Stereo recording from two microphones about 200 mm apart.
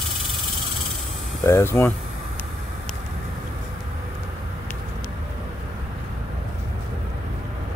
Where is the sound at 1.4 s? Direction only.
15° left (ahead or behind).